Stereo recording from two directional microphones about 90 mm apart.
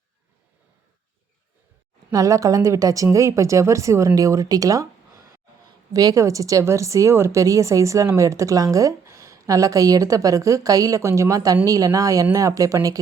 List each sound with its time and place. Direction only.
2.0 s speech: 35° right (ahead or behind)